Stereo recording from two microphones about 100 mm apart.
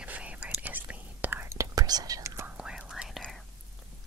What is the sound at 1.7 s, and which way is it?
Whispering, 40° right (ahead or behind).